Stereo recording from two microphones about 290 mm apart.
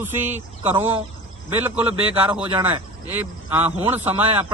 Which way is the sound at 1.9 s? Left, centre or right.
Centre.